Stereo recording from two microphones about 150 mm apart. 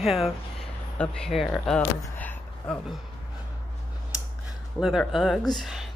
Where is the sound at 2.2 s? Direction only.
10° left (ahead or behind).